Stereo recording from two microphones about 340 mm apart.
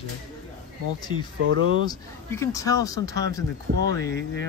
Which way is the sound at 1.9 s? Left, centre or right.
Centre.